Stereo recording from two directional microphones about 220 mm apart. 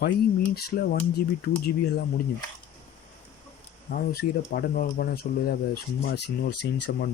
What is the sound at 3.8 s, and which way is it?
Speech, 40° left (ahead or behind).